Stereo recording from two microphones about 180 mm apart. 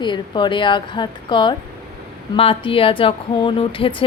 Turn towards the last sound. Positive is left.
turn(degrees=30)  # may be behind; listen again after turning